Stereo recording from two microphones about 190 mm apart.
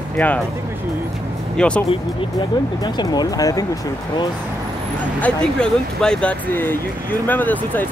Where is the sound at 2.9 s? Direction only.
20° left (ahead or behind).